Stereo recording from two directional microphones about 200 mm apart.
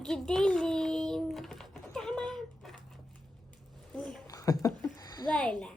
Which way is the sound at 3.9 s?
5° left (ahead or behind).